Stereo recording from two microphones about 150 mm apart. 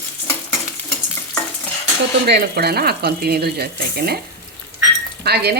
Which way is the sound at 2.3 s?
90° right.